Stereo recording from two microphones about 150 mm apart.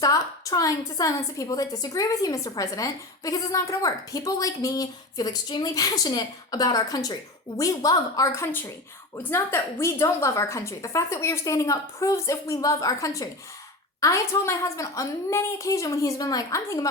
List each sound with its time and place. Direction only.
0.0 s a woman's voice: 25° left (ahead or behind)